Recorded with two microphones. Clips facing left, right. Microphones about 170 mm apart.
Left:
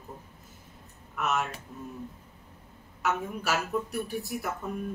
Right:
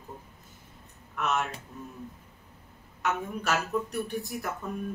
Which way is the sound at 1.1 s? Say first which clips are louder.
Even; 5° left (ahead or behind).